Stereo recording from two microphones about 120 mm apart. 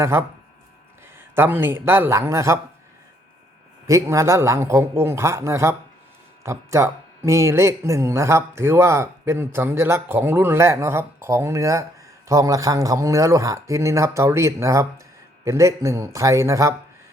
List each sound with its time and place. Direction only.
0.0 s speech: 20° right (ahead or behind)
1.4 s speech: 20° right (ahead or behind)
3.8 s speech: 25° right (ahead or behind)